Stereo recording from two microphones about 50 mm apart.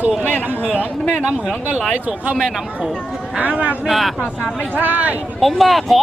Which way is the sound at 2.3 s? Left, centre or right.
Centre.